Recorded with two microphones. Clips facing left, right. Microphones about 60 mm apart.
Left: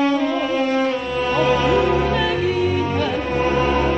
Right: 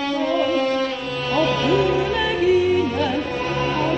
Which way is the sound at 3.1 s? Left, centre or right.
Left.